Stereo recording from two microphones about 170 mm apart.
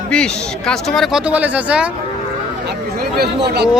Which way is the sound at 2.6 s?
65° right (ahead or behind).